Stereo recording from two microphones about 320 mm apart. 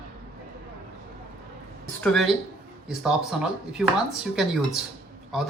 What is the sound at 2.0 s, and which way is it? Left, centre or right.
Speech, centre.